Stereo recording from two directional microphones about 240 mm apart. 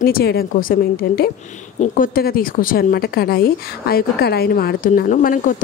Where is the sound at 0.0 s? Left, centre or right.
Left.